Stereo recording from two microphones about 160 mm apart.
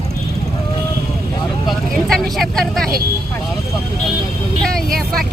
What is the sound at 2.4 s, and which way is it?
Speech, centre (ahead or behind).